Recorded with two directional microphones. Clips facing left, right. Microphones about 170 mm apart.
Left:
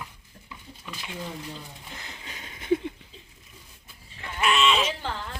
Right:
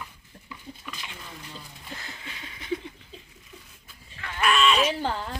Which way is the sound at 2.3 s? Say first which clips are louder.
Left 7 dB; 45° left (ahead or behind).